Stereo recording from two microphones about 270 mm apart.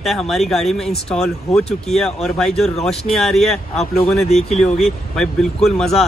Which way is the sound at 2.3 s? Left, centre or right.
Centre.